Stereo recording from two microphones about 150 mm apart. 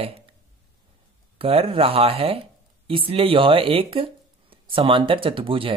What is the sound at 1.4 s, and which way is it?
Speech, 40° right (ahead or behind).